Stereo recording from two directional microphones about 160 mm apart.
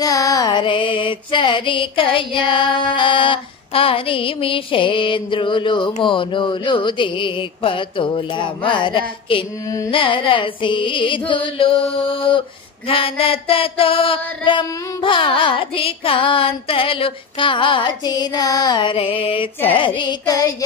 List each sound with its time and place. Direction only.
0.0 s carnatic music: 20° left (ahead or behind)